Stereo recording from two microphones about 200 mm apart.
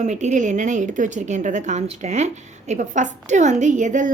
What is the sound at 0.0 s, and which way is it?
A woman's voice, 35° right (ahead or behind).